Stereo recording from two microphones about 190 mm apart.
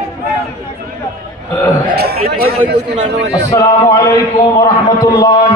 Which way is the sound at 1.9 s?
55° right (ahead or behind).